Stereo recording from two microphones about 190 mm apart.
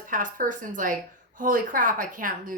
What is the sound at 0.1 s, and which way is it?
A woman's voice, 45° right (ahead or behind).